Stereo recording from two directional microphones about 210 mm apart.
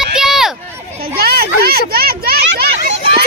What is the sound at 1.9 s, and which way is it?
Speech, 45° right (ahead or behind).